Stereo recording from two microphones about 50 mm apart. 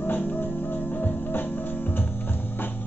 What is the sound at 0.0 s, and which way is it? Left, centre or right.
Music, left.